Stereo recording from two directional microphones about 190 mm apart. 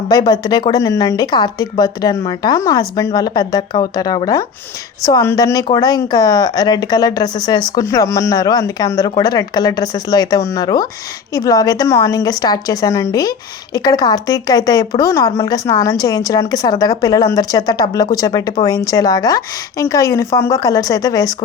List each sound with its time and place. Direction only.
0.1 s speech: 20° left (ahead or behind)